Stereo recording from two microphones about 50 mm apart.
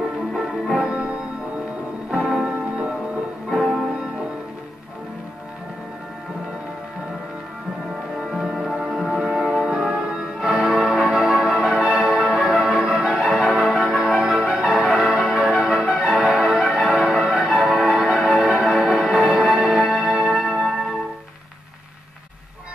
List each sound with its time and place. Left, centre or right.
0.7 s music: centre
3.4 s music: centre
8.2 s music: centre
13.2 s change ringing: centre
18.3 s music: centre